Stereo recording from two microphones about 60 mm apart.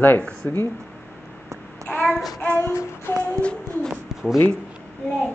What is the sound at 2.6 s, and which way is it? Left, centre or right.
Child singing, left.